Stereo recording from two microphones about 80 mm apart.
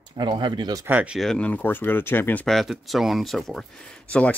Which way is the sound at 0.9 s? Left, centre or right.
Centre.